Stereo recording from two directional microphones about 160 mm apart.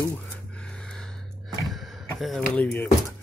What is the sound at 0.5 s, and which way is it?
Gasp, 5° left (ahead or behind).